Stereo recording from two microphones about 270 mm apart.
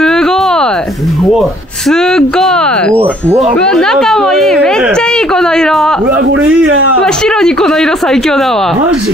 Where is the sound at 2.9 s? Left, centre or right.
Centre.